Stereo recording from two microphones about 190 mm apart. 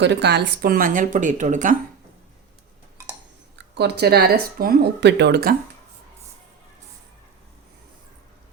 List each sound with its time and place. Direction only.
0.0 s speech: 65° right (ahead or behind); by 1.7 s 40° right (ahead or behind)
3.6 s speech: 65° right (ahead or behind)